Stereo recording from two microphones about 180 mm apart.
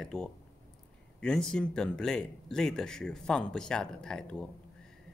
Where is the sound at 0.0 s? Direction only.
5° left (ahead or behind).